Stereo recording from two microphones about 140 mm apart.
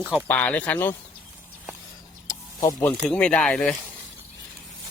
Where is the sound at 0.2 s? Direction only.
10° left (ahead or behind).